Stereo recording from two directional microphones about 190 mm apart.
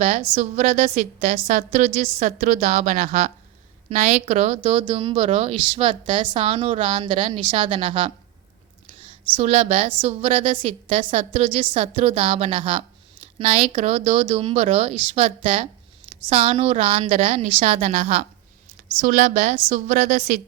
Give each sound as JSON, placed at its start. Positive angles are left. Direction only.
{"t": 0.0, "sound": "a woman's voice", "side_deg": -40}
{"t": 9.3, "sound": "a woman's voice", "side_deg": -35}